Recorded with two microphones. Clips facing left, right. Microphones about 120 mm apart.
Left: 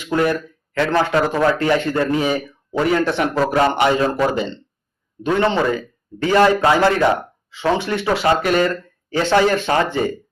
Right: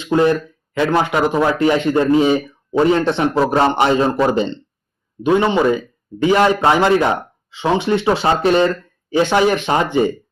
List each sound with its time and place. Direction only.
0.0 s speech: 25° right (ahead or behind)
5.2 s speech: 15° right (ahead or behind)